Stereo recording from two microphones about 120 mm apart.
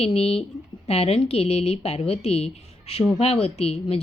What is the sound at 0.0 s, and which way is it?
A woman's voice, 55° left (ahead or behind).